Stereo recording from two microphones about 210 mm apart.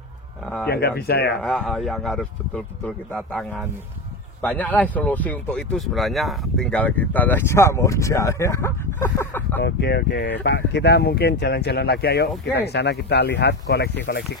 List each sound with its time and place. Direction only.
0.7 s speech: 50° left (ahead or behind)
1.3 s speech: centre (ahead or behind)
9.6 s speech: 55° left (ahead or behind)